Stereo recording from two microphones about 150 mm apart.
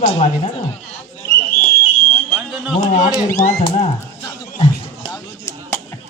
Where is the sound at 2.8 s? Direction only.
55° left (ahead or behind).